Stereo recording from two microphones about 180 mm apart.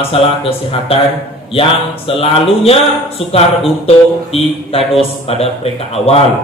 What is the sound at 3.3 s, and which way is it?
A man's voice, 35° left (ahead or behind).